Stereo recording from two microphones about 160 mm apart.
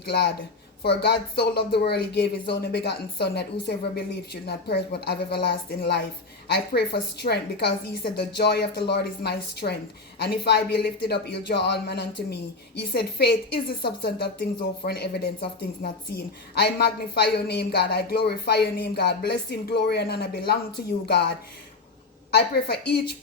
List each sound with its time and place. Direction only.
0.0 s a woman's voice: 90° left
22.3 s a woman's voice: 80° left